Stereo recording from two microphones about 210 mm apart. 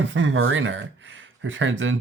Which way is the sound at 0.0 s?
65° right (ahead or behind).